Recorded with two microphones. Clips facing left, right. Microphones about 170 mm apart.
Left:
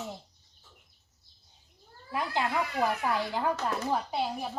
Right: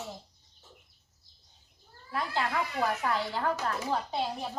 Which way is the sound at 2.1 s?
15° left (ahead or behind).